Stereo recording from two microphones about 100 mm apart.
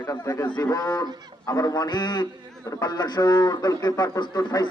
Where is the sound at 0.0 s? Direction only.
40° left (ahead or behind).